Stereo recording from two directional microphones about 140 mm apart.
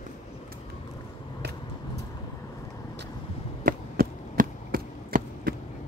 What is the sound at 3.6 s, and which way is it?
Chop, 85° right.